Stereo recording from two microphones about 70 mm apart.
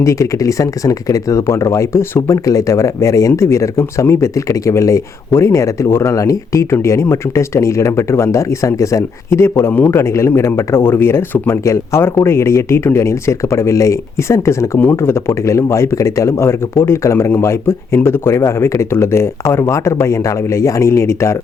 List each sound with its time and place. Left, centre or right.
0.0 s speech: left